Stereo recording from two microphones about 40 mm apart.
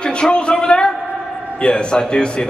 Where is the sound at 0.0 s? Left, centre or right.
Left.